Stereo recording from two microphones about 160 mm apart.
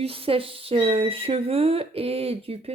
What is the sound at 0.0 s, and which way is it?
Speech, 35° right (ahead or behind).